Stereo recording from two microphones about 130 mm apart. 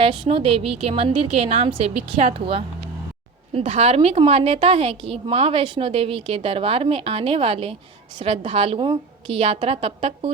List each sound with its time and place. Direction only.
0.0 s a woman's voice: 45° right (ahead or behind)